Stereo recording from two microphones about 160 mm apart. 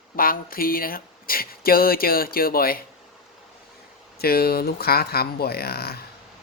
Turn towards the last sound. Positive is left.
turn(degrees=75)  # may be behind; listen again after turning